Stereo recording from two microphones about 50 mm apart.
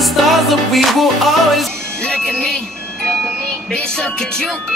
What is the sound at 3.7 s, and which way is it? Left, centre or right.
Music, centre.